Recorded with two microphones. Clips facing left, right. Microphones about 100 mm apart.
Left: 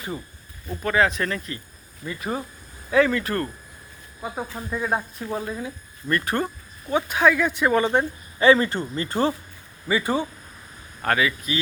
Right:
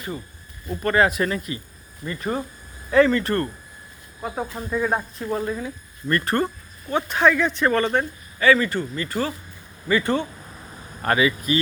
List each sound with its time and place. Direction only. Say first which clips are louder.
0.7 s speech: right 2 dB; centre (ahead or behind)
2.0 s speech: right 2 dB; 5° left (ahead or behind); by 9.3 s 30° left (ahead or behind)
9.9 s speech: right 2 dB; 10° left (ahead or behind)
11.0 s speech: right 2 dB; 5° right (ahead or behind)